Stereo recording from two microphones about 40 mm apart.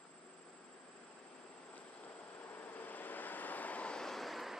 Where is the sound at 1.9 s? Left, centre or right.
Left.